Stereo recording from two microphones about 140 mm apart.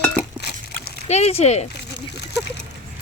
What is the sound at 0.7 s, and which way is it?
Splash, 50° left (ahead or behind).